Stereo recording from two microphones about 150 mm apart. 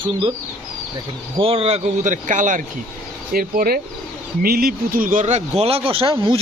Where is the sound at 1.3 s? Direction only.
40° right (ahead or behind); by 2.6 s 60° right (ahead or behind).